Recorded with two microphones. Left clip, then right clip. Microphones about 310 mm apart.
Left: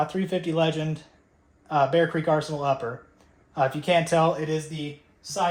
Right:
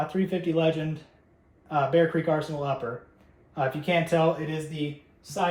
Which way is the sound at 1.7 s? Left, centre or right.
Left.